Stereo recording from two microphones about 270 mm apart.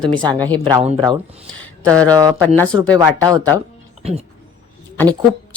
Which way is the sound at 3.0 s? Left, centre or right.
Centre.